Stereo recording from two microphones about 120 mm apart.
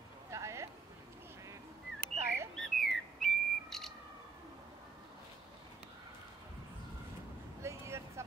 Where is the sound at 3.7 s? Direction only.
5° left (ahead or behind).